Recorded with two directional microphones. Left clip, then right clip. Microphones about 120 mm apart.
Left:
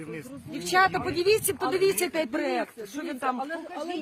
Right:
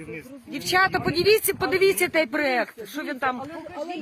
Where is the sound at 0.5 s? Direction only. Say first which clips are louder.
Right 2 dB; 90° right.